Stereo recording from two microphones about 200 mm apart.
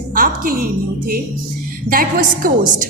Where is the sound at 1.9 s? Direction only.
45° right (ahead or behind).